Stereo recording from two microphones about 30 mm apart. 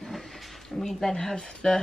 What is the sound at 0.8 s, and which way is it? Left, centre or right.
Speech, centre.